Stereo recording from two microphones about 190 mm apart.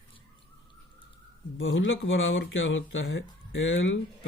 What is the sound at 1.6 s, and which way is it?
Speech, 90° left.